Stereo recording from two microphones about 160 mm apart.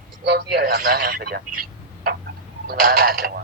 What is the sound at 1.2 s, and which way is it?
Speech, 75° right (ahead or behind).